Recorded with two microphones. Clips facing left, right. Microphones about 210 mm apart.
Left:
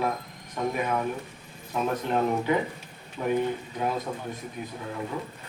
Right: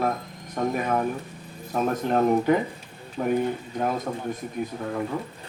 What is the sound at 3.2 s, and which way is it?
Speech, 45° right (ahead or behind).